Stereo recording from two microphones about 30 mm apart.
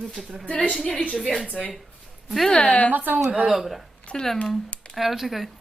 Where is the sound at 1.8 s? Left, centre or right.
Centre.